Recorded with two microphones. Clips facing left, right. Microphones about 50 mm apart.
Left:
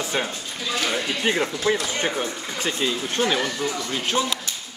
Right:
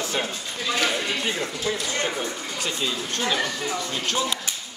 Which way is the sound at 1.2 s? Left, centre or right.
Left.